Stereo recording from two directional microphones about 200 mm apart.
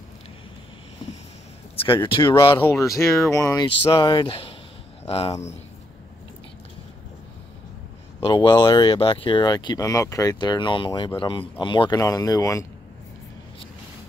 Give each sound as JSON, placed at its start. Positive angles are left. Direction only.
{"t": 2.0, "sound": "speech", "side_deg": 25}
{"t": 8.2, "sound": "speech", "side_deg": 20}